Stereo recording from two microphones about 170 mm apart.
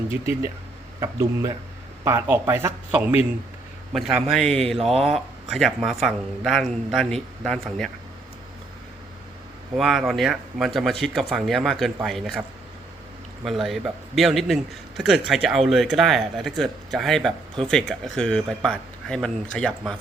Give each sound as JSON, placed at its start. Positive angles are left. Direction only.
{"t": 0.1, "sound": "speech", "side_deg": -15}
{"t": 3.9, "sound": "a man's voice", "side_deg": 0}
{"t": 9.7, "sound": "a man's voice", "side_deg": 0}
{"t": 13.4, "sound": "a man's voice", "side_deg": 0}